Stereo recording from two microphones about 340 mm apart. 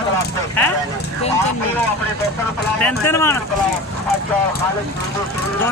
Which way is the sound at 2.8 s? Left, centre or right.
Centre.